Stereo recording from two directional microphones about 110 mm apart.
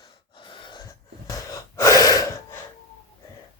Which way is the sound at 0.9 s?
30° left (ahead or behind).